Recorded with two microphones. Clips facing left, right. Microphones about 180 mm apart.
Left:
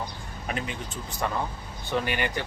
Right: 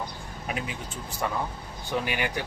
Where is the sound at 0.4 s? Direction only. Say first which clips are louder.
Left 1 dB; 5° right (ahead or behind).